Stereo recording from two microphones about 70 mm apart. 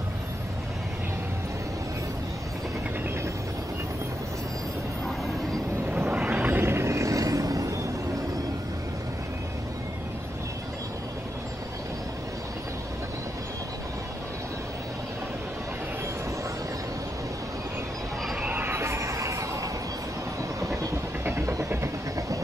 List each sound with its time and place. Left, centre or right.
5.9 s vehicle: right
6.1 s vehicle: centre; by 7.8 s right
18.5 s music: right
20.6 s train: right
21.2 s vehicle: right